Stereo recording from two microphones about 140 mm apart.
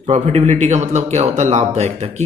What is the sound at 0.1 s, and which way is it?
A man's voice, 50° right (ahead or behind).